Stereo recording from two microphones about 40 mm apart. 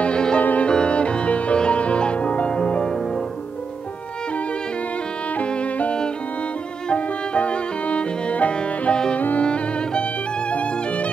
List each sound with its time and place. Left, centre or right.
0.0 s music: left
0.4 s music: left
0.7 s music: left
5.5 s violin: left
6.9 s music: left
10.5 s violin: left